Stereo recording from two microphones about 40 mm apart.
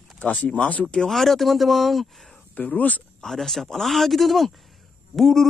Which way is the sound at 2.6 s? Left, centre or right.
Left.